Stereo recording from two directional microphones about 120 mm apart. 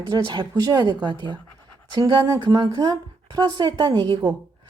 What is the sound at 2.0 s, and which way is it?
A woman's voice, 30° right (ahead or behind).